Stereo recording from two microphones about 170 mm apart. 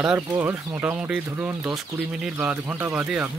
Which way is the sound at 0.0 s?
10° right (ahead or behind).